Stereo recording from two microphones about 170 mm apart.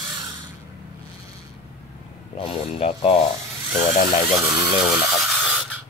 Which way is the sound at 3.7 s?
45° left (ahead or behind).